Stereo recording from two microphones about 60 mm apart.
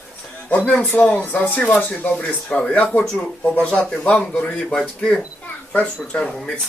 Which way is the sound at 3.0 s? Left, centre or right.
Centre.